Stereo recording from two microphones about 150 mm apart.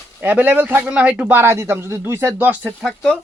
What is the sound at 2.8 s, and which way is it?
Speech, 5° left (ahead or behind).